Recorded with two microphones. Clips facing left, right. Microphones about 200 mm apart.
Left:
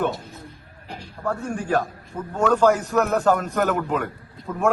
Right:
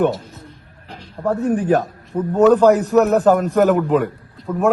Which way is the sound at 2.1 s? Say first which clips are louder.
Right 10 dB; 40° right (ahead or behind).